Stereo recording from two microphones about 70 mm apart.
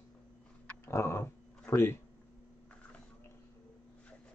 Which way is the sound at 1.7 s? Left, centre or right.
Left.